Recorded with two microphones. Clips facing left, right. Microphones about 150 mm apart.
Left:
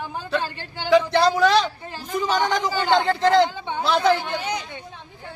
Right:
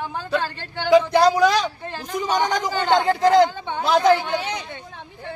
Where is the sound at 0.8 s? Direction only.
15° right (ahead or behind).